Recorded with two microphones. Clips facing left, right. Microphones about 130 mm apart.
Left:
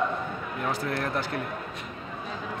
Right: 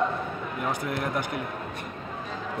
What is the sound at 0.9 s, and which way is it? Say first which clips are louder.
Speech: even; 15° right (ahead or behind).